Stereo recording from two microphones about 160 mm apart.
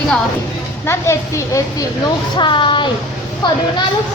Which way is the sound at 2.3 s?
30° left (ahead or behind).